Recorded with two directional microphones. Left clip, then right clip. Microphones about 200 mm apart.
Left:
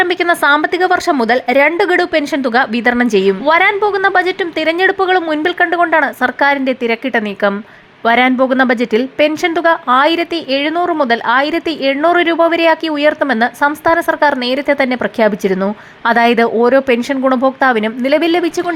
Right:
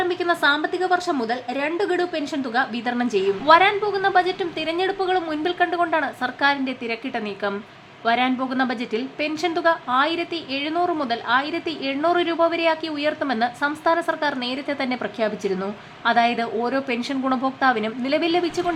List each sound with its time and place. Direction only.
0.0 s a woman's voice: 35° left (ahead or behind)